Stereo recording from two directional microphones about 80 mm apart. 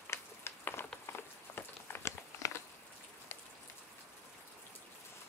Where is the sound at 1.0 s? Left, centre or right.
Left.